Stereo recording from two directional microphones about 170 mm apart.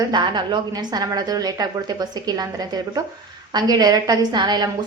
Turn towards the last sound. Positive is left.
turn(degrees=-25)  # may be behind; listen again after turning